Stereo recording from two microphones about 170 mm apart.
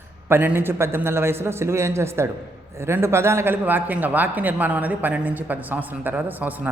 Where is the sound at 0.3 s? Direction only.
15° right (ahead or behind).